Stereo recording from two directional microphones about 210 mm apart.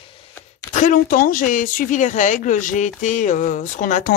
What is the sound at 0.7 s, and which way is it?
Speech, 40° left (ahead or behind).